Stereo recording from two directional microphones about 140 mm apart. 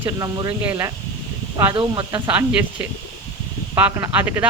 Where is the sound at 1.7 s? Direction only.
35° right (ahead or behind).